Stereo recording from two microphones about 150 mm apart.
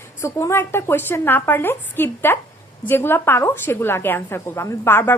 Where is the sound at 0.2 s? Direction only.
20° left (ahead or behind).